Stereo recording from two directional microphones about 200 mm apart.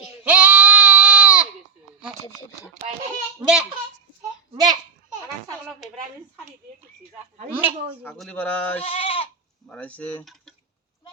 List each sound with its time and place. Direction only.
0.3 s goat: 5° right (ahead or behind)
4.5 s a child's voice: 20° right (ahead or behind)
7.5 s speech: 10° right (ahead or behind)
8.0 s speech: 5° left (ahead or behind)
8.8 s goat: 30° left (ahead or behind)
9.6 s speech: 5° left (ahead or behind)